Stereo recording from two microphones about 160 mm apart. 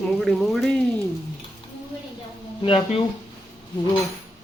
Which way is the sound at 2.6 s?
35° left (ahead or behind).